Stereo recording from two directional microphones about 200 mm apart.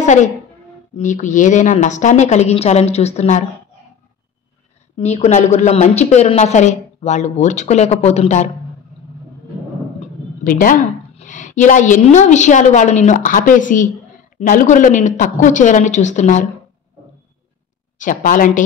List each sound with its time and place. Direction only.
0.0 s a woman's voice: 35° left (ahead or behind)
4.9 s speech: 30° left (ahead or behind)
10.4 s speech: 45° left (ahead or behind)
17.9 s speech: 40° left (ahead or behind)